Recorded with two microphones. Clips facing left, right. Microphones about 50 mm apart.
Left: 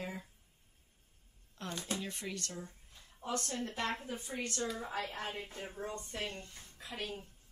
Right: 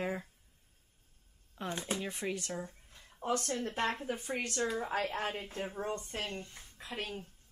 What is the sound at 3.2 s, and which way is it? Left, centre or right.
Speech, right.